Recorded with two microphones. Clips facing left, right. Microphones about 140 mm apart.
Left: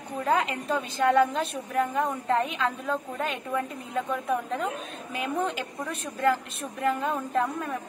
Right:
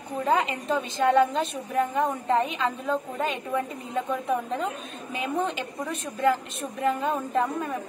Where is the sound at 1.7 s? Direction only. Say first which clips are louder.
Right 2 dB; 10° right (ahead or behind).